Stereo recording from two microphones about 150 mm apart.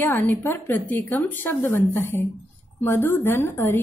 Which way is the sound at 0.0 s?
10° left (ahead or behind).